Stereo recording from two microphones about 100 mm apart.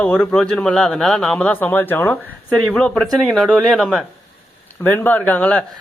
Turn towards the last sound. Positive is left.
turn(degrees=15)  # may be behind; listen again after turning